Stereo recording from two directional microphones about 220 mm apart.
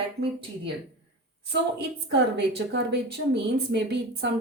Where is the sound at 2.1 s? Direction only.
50° right (ahead or behind).